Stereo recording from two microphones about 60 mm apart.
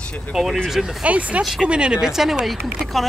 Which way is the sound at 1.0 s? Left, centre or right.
Right.